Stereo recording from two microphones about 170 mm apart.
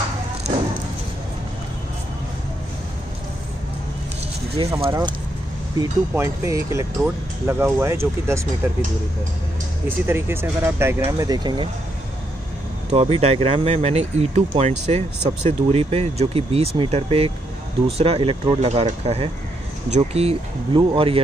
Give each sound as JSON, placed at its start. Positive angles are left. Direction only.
{"t": 4.6, "sound": "speech", "side_deg": -30}
{"t": 5.8, "sound": "speech", "side_deg": -15}
{"t": 9.8, "sound": "speech", "side_deg": -15}
{"t": 12.9, "sound": "speech", "side_deg": -35}